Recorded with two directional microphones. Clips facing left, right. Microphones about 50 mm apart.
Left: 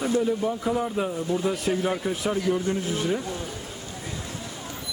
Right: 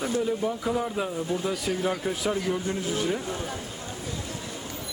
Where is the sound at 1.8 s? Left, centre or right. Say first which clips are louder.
Left 1 dB; centre.